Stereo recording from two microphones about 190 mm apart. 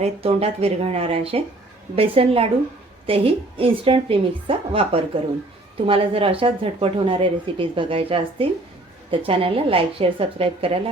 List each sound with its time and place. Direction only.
0.0 s speech: 30° right (ahead or behind)